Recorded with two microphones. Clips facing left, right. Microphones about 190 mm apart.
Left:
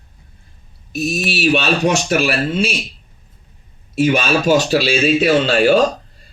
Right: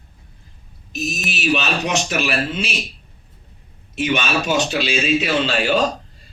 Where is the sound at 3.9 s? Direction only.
35° left (ahead or behind).